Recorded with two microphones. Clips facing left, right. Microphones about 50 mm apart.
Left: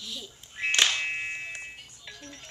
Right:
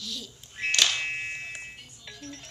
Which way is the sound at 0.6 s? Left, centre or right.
Centre.